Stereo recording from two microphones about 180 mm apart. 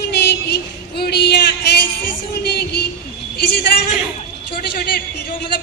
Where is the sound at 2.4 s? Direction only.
65° left (ahead or behind).